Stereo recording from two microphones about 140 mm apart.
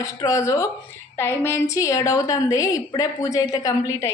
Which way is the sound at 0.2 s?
20° left (ahead or behind).